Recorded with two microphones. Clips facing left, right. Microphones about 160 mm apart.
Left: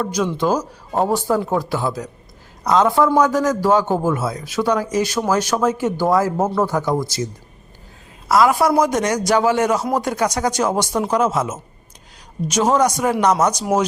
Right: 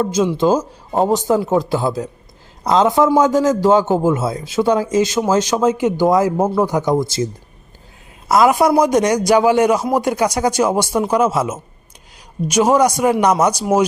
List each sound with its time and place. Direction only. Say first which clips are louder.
0.0 s speech: right 4 dB; 25° right (ahead or behind)
8.3 s speech: right 2 dB; 20° right (ahead or behind)